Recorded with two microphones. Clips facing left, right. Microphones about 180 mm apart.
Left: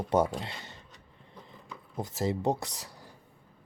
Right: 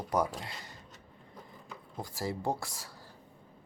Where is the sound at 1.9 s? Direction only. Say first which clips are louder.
Left 6 dB; 20° left (ahead or behind).